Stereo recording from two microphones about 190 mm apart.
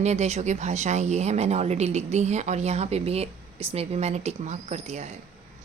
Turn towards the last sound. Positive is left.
turn(degrees=-35)  # may be behind; listen again after turning